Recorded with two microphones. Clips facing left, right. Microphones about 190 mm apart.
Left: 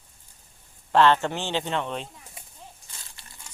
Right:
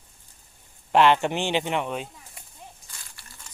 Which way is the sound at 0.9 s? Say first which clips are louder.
Right 1 dB; 15° right (ahead or behind).